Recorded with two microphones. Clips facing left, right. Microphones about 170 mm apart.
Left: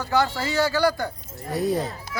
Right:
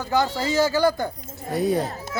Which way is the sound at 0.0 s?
20° right (ahead or behind).